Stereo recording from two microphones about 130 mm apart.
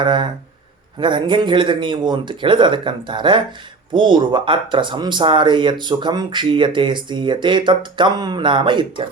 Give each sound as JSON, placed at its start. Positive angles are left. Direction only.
{"t": 0.0, "sound": "speech", "side_deg": -35}